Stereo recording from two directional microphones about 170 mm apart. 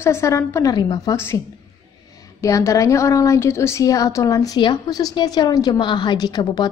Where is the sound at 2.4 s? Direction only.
20° left (ahead or behind).